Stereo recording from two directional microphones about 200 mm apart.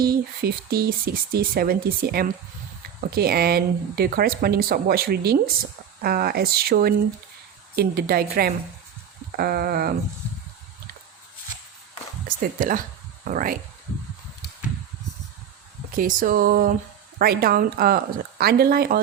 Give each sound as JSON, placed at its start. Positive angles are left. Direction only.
{"t": 0.0, "sound": "speech", "side_deg": -50}
{"t": 12.4, "sound": "speech", "side_deg": -45}
{"t": 16.0, "sound": "speech", "side_deg": -45}